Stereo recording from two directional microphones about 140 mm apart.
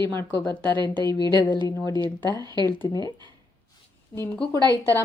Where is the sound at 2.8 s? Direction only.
25° left (ahead or behind).